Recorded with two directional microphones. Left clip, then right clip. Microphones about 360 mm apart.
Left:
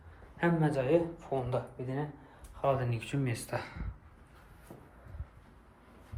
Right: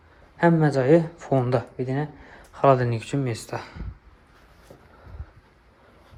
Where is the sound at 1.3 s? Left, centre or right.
Right.